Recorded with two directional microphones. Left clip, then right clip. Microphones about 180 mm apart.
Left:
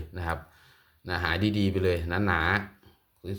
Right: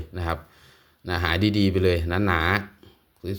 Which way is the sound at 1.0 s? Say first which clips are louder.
Right 4 dB; 30° right (ahead or behind).